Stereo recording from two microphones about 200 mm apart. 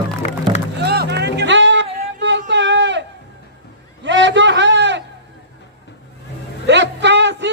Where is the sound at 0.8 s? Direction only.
55° right (ahead or behind).